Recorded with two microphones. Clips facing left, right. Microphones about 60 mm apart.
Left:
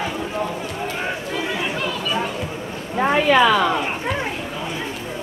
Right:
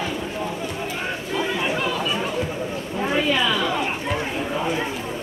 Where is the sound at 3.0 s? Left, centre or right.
Left.